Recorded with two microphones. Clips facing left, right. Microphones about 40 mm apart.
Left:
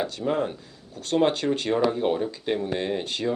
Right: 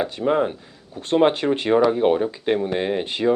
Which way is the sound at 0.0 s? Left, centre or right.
Right.